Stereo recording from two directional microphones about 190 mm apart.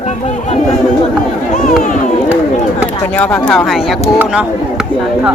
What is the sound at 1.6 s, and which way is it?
Run, 45° left (ahead or behind).